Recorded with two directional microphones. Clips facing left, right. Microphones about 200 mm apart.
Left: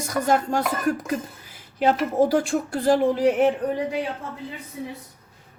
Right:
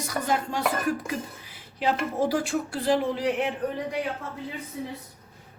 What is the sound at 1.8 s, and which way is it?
Speech, 45° left (ahead or behind).